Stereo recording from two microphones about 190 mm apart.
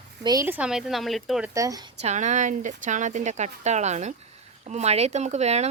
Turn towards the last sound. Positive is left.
turn(degrees=-35)  # may be behind; listen again after turning